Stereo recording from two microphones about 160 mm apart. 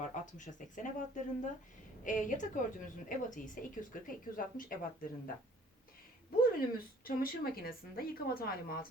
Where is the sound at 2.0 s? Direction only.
50° left (ahead or behind).